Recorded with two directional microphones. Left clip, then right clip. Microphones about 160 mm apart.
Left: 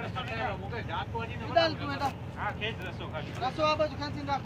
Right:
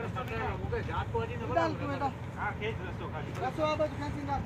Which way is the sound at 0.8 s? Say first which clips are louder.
Right 1 dB; 35° left (ahead or behind).